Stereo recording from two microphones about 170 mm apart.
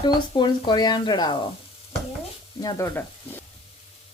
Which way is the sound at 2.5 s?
20° left (ahead or behind).